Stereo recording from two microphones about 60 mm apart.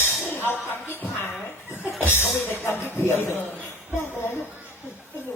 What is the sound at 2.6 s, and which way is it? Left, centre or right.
Speech, left.